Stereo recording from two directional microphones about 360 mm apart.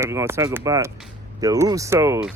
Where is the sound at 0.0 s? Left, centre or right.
Centre.